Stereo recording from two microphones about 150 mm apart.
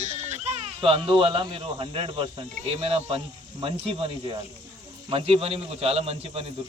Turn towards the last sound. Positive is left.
turn(degrees=-40)  # may be behind; listen again after turning